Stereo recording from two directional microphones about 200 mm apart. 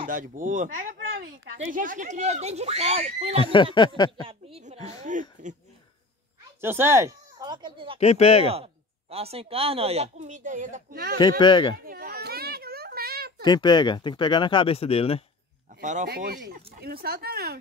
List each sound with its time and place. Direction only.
0.0 s speech: 40° right (ahead or behind)
3.3 s speech: 25° left (ahead or behind)
6.6 s speech: 10° right (ahead or behind)
8.0 s speech: 30° left (ahead or behind)
9.1 s speech: 30° right (ahead or behind); by 11.1 s 50° right (ahead or behind)
11.1 s speech: 20° left (ahead or behind)
11.8 s children playing: 50° right (ahead or behind)
13.4 s speech: 20° left (ahead or behind)
15.7 s speech: 40° right (ahead or behind)